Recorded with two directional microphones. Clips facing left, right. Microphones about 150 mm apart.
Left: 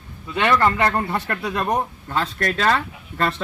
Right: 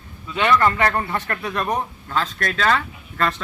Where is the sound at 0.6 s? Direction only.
20° left (ahead or behind).